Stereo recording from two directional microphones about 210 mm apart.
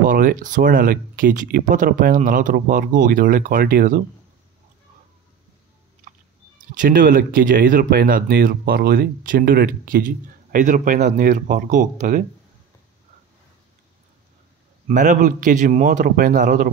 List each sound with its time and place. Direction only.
0.0 s speech: 40° right (ahead or behind)
6.8 s speech: 45° right (ahead or behind)
14.9 s speech: 40° right (ahead or behind)